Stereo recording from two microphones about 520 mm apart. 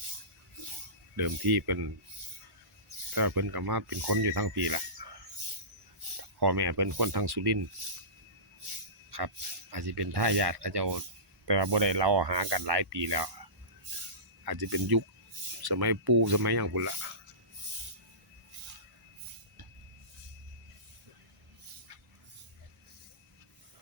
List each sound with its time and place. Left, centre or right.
1.1 s speech: right
3.2 s speech: right
5.0 s a sound: right
6.4 s speech: right
9.7 s speech: right
13.9 s a sound: right
14.4 s speech: right